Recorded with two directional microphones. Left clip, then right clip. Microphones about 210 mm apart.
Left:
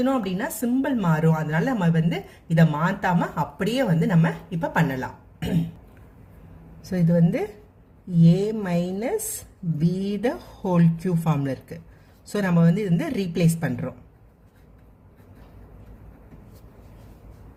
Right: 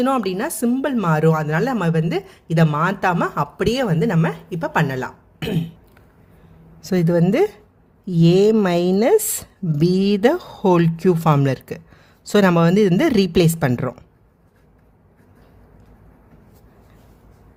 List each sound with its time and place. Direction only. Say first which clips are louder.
0.0 s a woman's voice: right 5 dB; 45° right (ahead or behind)
6.9 s a woman's voice: right 6 dB; 55° right (ahead or behind)